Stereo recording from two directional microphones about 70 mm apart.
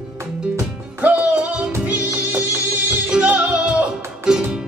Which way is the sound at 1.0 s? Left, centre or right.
Right.